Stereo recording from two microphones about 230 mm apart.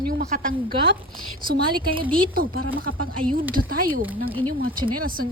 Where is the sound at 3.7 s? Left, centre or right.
Right.